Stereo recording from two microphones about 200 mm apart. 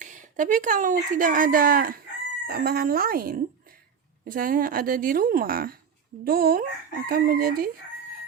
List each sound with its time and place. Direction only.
0.0 s a woman's voice: 40° right (ahead or behind)